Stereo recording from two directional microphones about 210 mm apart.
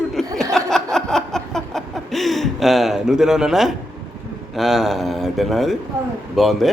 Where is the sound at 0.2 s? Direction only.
Centre (ahead or behind).